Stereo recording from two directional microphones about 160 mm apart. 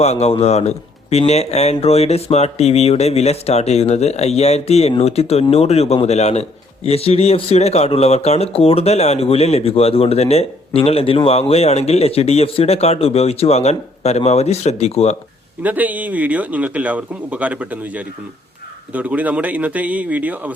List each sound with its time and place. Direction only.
0.0 s a man's voice: 40° left (ahead or behind)
15.6 s speech: 10° right (ahead or behind)